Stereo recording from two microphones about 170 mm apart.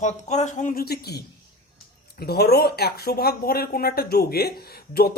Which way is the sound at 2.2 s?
70° left (ahead or behind).